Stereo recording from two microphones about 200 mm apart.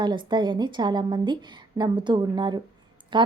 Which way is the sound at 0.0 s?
20° right (ahead or behind).